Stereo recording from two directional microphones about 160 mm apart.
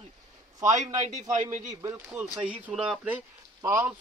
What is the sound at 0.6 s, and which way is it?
Speech, 20° right (ahead or behind).